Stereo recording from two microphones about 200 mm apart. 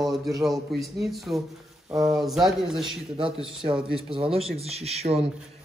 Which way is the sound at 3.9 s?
25° right (ahead or behind).